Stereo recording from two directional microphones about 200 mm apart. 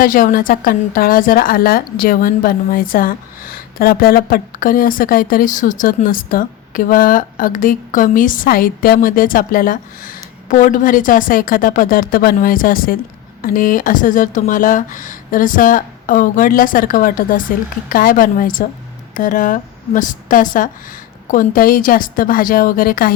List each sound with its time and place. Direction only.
0.0 s a woman's voice: 45° left (ahead or behind)